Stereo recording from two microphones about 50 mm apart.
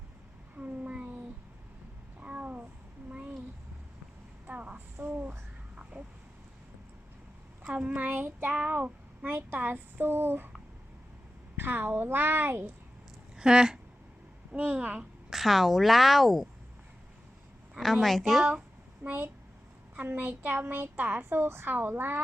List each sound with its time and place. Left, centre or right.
0.5 s a sound: right
2.2 s a sound: right
4.4 s a sound: right
5.0 s a sound: right
5.7 s vehicle: right
7.7 s a child's voice: right
8.5 s a child's voice: right
9.3 s speech: right
11.5 s speech: right
13.3 s speech: centre
15.3 s a woman's voice: centre
18.0 s a woman's voice: centre
19.0 s speech: right